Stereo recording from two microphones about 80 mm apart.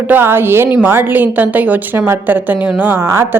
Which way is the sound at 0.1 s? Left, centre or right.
Right.